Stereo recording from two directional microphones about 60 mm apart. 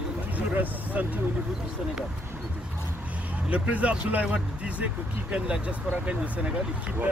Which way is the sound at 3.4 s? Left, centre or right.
Right.